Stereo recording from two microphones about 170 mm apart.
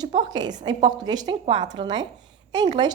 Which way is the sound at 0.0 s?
25° right (ahead or behind).